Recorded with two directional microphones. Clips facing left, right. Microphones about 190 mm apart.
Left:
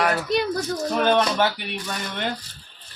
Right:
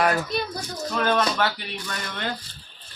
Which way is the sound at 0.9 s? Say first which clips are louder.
Left 2 dB; 20° left (ahead or behind).